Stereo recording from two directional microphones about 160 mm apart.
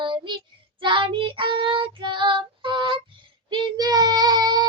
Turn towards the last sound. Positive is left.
turn(degrees=-25)  # may be behind; listen again after turning